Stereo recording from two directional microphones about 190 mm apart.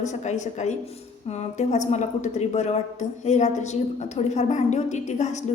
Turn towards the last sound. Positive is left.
turn(degrees=40)  # may be behind; listen again after turning